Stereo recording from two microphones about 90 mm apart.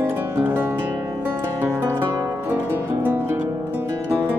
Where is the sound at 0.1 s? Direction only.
20° right (ahead or behind).